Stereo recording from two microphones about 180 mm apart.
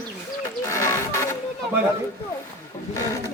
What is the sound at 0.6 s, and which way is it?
Music, 15° left (ahead or behind).